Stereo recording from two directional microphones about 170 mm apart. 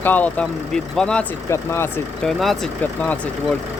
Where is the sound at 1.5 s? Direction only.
15° left (ahead or behind).